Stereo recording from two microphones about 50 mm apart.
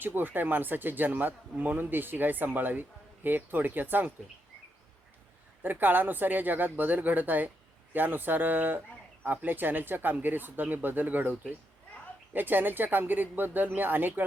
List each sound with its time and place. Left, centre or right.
0.0 s speech: right
5.6 s speech: right